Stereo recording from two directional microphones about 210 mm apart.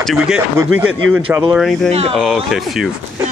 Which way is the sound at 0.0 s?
Centre (ahead or behind).